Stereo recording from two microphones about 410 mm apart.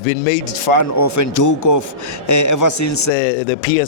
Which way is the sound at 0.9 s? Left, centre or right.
Left.